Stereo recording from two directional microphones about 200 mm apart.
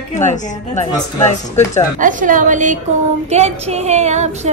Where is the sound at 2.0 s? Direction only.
40° right (ahead or behind).